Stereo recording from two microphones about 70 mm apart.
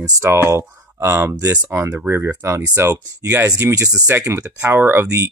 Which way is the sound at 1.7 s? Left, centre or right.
Right.